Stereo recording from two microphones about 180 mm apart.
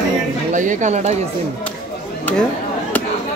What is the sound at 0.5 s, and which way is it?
Speech, 45° right (ahead or behind).